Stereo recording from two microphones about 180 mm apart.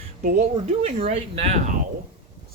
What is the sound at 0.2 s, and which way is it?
Speech, 50° right (ahead or behind).